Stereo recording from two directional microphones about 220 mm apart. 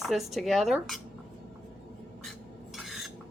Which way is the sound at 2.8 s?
Centre (ahead or behind).